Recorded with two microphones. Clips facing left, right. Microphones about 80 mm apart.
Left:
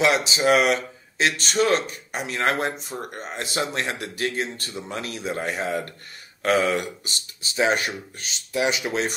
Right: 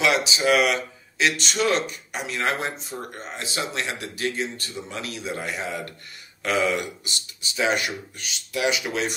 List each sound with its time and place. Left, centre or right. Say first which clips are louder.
0.0 s speech: left 1 dB; left